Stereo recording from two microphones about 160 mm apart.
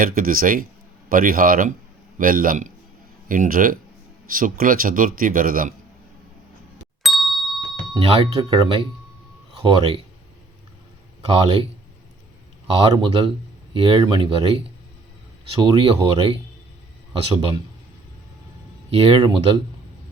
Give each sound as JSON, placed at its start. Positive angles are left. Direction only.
{"t": 0.0, "sound": "a man's voice", "side_deg": -60}
{"t": 7.0, "sound": "ding", "side_deg": 0}
{"t": 7.9, "sound": "speech", "side_deg": -35}
{"t": 11.3, "sound": "speech", "side_deg": -35}
{"t": 12.7, "sound": "speech", "side_deg": -30}
{"t": 15.5, "sound": "speech", "side_deg": -30}
{"t": 18.9, "sound": "speech", "side_deg": -35}